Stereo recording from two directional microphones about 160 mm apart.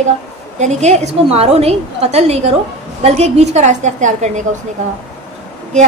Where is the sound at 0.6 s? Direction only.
45° right (ahead or behind).